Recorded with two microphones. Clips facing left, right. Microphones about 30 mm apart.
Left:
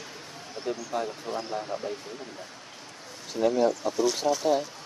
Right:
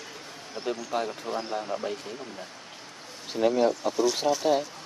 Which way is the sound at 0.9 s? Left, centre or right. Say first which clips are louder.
Right 2 dB; right.